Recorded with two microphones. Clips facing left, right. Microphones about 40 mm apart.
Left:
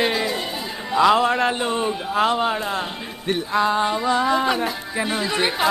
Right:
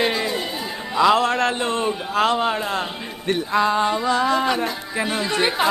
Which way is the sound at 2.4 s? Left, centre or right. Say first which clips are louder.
Even; centre.